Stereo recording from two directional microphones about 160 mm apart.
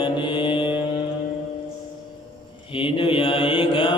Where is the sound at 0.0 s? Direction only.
30° left (ahead or behind).